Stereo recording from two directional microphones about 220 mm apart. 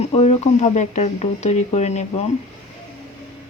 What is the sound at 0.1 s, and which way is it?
Speech, 25° left (ahead or behind).